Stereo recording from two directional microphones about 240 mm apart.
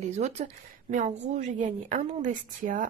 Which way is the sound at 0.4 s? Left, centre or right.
Right.